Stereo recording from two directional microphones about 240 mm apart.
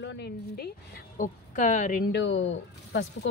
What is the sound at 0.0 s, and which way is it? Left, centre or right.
Speech, left.